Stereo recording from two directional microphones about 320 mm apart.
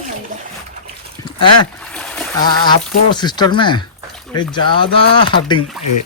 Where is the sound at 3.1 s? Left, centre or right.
Centre.